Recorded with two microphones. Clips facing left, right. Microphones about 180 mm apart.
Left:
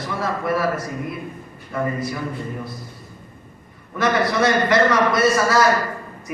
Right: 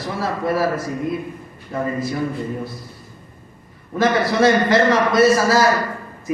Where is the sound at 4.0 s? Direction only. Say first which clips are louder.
Right 3 dB; 25° right (ahead or behind).